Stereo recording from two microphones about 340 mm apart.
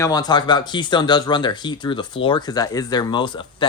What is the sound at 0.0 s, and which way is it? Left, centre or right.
Speech, centre.